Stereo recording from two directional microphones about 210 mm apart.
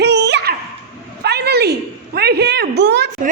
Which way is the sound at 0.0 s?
55° right (ahead or behind).